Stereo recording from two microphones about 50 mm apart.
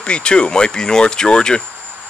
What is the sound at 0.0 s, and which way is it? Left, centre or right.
Speech, centre.